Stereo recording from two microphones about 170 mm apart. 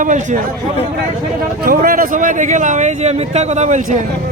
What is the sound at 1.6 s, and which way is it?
Speech, 60° right (ahead or behind).